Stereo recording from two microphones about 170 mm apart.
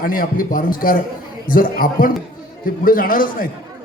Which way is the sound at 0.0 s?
55° left (ahead or behind).